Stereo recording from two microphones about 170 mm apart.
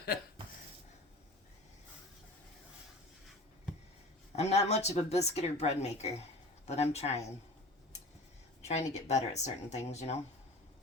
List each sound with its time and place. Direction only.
4.3 s speech: 40° left (ahead or behind)
8.6 s speech: 40° left (ahead or behind)